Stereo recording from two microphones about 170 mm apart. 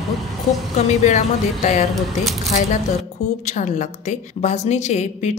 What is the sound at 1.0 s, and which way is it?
Speech, 45° left (ahead or behind).